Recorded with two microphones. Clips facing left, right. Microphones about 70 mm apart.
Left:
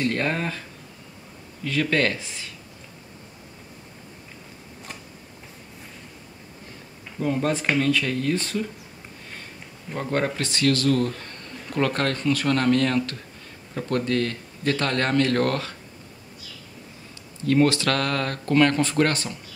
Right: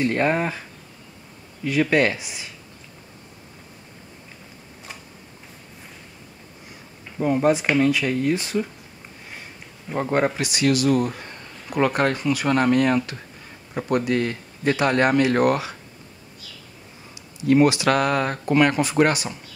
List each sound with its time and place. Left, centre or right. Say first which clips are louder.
0.0 s a man's voice: right 4 dB; centre
7.2 s a man's voice: right 5 dB; centre
9.8 s a man's voice: right 4 dB; centre
17.1 s a man's voice: right 4 dB; centre